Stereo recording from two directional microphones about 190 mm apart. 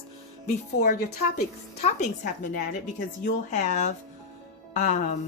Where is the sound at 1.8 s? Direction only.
35° left (ahead or behind).